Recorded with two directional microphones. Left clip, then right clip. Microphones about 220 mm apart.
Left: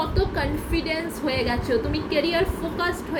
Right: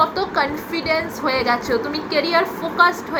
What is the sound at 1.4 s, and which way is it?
A woman's voice, 25° right (ahead or behind).